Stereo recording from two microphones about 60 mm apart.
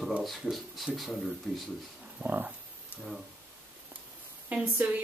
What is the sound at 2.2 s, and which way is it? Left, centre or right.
Speech, right.